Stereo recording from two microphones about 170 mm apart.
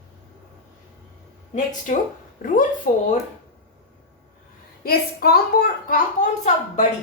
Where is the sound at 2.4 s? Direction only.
55° left (ahead or behind).